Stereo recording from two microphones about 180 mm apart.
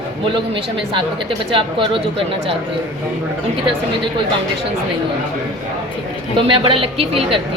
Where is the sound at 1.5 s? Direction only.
30° right (ahead or behind).